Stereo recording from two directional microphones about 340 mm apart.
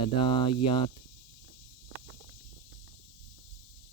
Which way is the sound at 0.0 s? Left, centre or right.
Centre.